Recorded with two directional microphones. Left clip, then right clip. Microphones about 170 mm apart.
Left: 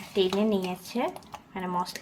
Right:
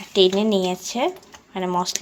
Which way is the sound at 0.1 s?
40° right (ahead or behind).